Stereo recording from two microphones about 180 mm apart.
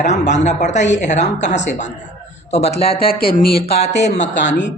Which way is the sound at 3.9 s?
70° left (ahead or behind).